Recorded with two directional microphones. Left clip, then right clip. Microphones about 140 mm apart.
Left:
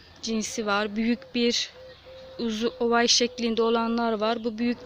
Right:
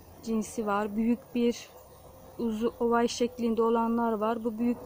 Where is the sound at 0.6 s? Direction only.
20° left (ahead or behind).